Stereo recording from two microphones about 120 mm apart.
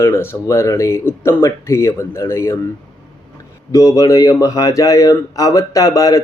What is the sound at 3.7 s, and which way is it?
Speech, 25° left (ahead or behind).